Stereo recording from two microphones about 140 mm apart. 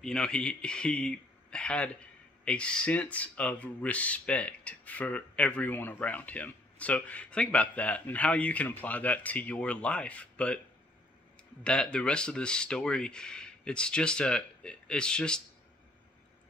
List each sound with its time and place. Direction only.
0.0 s a man's voice: 5° left (ahead or behind)
11.6 s speech: 5° left (ahead or behind)